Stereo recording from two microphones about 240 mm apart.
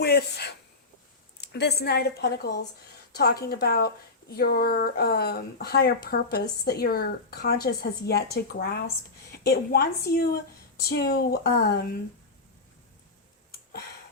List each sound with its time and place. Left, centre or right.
0.0 s a woman's voice: left